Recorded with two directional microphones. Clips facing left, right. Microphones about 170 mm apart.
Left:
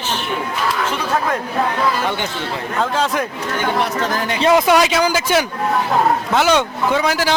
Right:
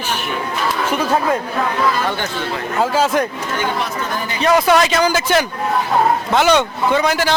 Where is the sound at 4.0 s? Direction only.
85° left.